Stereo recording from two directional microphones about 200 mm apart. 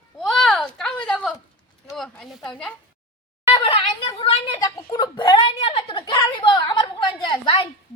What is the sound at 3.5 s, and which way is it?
A woman's voice, 25° left (ahead or behind).